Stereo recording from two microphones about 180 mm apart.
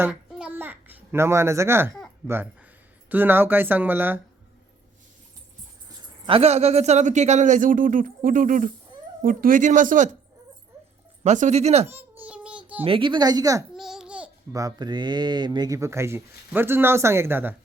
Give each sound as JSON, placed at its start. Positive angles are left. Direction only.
{"t": 0.0, "sound": "a sound", "side_deg": -5}
{"t": 2.2, "sound": "speech", "side_deg": -10}
{"t": 6.0, "sound": "speech", "side_deg": -30}
{"t": 11.2, "sound": "speech", "side_deg": -40}
{"t": 11.9, "sound": "a sound", "side_deg": -10}
{"t": 12.8, "sound": "speech", "side_deg": -30}
{"t": 13.7, "sound": "babbling", "side_deg": -5}
{"t": 14.5, "sound": "speech", "side_deg": -20}